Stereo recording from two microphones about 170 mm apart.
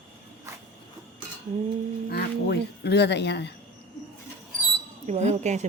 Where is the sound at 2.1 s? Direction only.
75° left (ahead or behind).